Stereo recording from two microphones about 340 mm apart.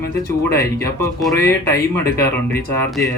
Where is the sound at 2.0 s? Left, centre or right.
Left.